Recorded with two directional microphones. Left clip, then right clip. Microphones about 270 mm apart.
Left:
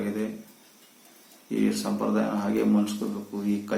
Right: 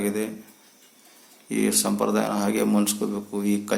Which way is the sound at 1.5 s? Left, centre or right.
Right.